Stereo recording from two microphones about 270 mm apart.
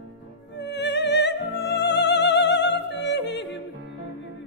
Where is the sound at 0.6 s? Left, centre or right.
Left.